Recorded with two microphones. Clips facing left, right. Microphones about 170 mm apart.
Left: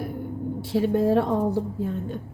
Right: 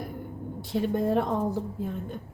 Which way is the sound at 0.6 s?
Centre (ahead or behind).